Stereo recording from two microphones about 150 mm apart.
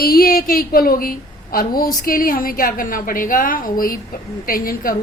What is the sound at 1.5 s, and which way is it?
A woman's voice, 75° left (ahead or behind).